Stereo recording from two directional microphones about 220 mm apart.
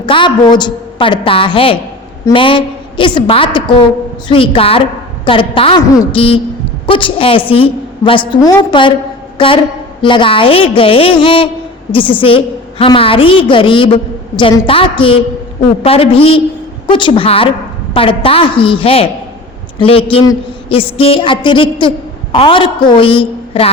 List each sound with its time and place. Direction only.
0.0 s a woman's voice: 20° left (ahead or behind)